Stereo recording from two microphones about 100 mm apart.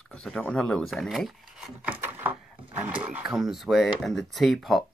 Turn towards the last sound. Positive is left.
turn(degrees=0)  # may be behind; listen again after turning